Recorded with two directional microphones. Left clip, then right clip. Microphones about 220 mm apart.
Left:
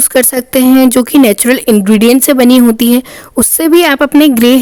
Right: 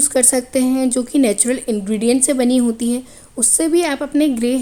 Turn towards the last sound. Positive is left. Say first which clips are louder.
# left 11 dB
turn(degrees=45)  # may be behind; listen again after turning